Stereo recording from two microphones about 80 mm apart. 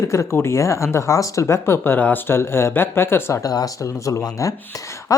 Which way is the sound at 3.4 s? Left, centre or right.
Left.